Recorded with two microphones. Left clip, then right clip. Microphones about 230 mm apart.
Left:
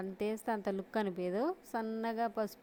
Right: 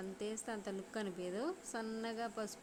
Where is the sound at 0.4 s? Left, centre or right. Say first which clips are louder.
Left 8 dB; left.